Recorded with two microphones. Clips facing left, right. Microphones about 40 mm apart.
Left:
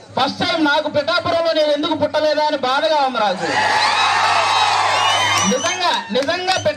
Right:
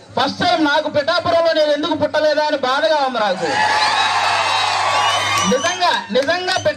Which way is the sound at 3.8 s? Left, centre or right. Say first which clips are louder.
Left 1 dB; left.